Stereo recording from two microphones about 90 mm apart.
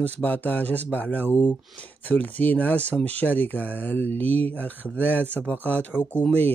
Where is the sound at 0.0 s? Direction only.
20° left (ahead or behind).